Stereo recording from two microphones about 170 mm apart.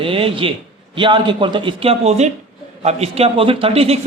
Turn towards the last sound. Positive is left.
turn(degrees=-35)  # may be behind; listen again after turning